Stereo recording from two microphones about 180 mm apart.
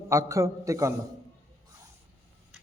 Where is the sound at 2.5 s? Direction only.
5° right (ahead or behind).